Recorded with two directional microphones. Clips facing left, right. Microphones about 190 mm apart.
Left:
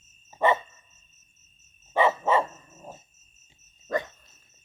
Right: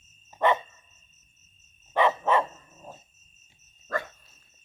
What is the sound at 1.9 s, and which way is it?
Dog, 10° left (ahead or behind).